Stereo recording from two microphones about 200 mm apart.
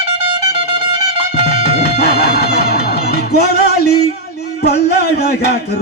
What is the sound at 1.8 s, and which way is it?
Music, 55° left (ahead or behind).